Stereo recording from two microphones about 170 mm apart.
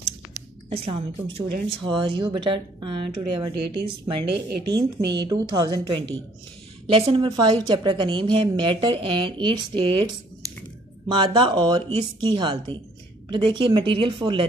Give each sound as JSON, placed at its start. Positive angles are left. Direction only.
{"t": 0.7, "sound": "a woman's voice", "side_deg": -35}
{"t": 4.3, "sound": "speech", "side_deg": -80}
{"t": 5.2, "sound": "a woman's voice", "side_deg": -25}